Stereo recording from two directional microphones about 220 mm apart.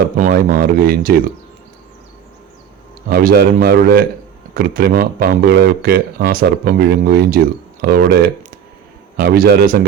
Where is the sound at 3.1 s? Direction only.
45° right (ahead or behind).